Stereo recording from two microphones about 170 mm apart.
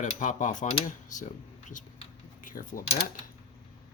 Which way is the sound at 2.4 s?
50° left (ahead or behind).